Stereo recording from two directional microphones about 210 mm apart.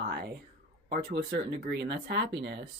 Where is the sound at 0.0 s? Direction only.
50° right (ahead or behind).